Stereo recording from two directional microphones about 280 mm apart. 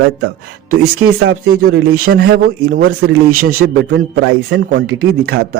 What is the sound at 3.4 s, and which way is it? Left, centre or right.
Speech, right.